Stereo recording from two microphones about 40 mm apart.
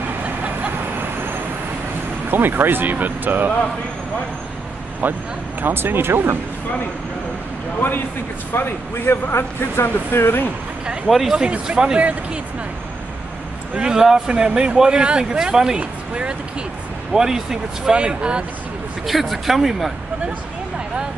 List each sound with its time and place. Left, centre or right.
2.2 s speech: right
5.0 s speech: right
5.6 s speech: right
7.8 s a man's voice: left
11.1 s speech: centre
11.3 s a man's voice: right
13.7 s a man's voice: centre
15.8 s speech: right
17.1 s speech: centre
17.9 s a man's voice: right
19.0 s speech: centre